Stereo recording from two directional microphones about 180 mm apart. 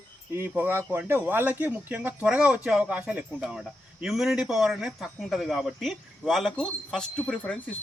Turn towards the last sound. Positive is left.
turn(degrees=0)  # may be behind; listen again after turning